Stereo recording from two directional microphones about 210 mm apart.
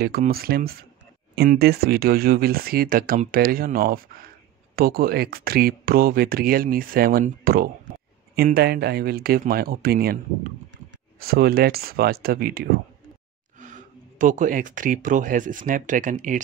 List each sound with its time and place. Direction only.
0.0 s speech: 45° right (ahead or behind)
11.1 s speech: 45° right (ahead or behind)